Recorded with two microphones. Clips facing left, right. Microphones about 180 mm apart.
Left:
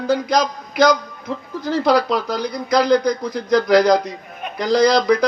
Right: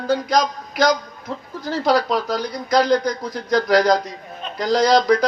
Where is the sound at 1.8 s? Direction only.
40° right (ahead or behind).